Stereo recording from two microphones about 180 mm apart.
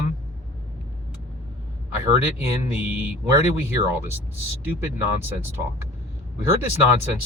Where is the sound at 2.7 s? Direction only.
10° right (ahead or behind).